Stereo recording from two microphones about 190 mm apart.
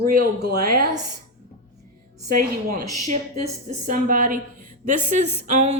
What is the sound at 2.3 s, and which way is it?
A woman's voice, 45° right (ahead or behind).